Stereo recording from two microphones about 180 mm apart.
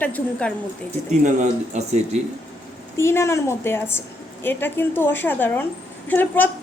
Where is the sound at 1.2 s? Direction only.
40° right (ahead or behind).